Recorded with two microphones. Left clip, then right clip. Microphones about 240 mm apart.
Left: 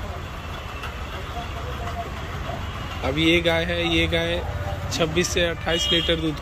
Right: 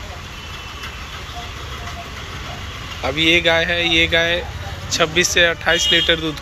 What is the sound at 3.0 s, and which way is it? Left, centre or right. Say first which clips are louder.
Speech: right 5 dB; centre.